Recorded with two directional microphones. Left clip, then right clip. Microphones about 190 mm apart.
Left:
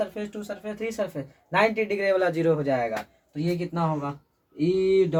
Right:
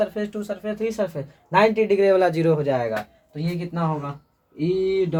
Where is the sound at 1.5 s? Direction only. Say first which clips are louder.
Right 5 dB; 35° right (ahead or behind).